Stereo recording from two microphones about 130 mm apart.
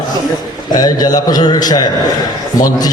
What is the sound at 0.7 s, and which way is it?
A man's voice, 30° left (ahead or behind).